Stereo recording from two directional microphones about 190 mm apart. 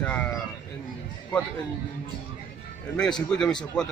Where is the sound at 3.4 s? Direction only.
5° left (ahead or behind).